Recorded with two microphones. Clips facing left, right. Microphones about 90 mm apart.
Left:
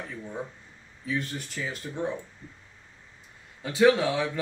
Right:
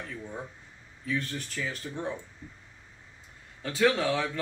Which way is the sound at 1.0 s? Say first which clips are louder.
Left 1 dB; 15° left (ahead or behind).